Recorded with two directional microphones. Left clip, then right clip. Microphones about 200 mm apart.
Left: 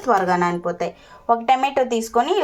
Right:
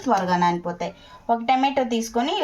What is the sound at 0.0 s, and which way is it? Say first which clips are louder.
Speech: left 2 dB; 15° left (ahead or behind).